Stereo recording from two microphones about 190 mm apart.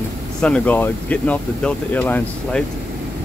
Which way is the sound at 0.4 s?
5° left (ahead or behind).